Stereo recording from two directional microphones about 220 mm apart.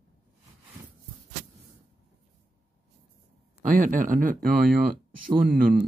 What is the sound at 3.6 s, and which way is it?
Speech, 35° right (ahead or behind).